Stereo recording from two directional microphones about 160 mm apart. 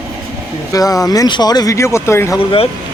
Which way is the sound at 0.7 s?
20° left (ahead or behind).